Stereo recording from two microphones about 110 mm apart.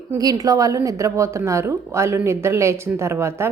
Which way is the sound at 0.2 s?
35° right (ahead or behind).